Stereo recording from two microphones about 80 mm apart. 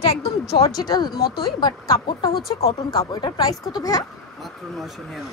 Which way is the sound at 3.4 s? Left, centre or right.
Left.